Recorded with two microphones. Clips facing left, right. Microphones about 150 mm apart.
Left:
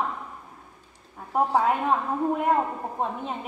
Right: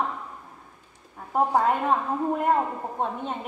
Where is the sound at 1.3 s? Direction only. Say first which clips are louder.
Right 1 dB; centre (ahead or behind).